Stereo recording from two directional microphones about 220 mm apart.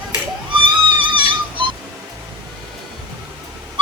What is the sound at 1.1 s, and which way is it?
Music, 20° right (ahead or behind).